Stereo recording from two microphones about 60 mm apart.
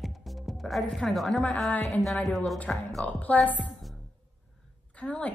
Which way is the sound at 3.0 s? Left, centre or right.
Left.